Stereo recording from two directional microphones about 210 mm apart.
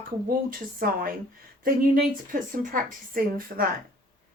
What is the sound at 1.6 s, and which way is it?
Speech, 40° right (ahead or behind).